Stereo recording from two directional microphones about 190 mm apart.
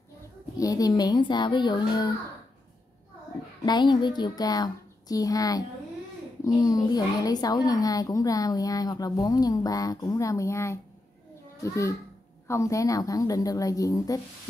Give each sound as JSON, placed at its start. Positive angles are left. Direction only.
{"t": 0.6, "sound": "a woman's voice", "side_deg": 20}
{"t": 3.6, "sound": "a woman's voice", "side_deg": 25}